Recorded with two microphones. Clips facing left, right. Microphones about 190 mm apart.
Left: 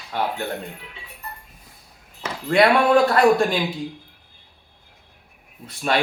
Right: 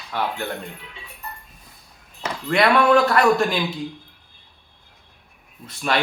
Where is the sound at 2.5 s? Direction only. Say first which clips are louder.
Left 1 dB; 30° left (ahead or behind).